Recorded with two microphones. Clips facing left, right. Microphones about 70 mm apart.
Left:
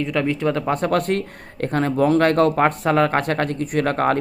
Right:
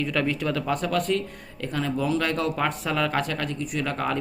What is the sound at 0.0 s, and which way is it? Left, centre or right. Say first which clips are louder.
Speech: left 5 dB; left.